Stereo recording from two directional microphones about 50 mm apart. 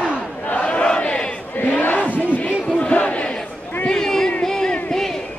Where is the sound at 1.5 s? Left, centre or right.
Left.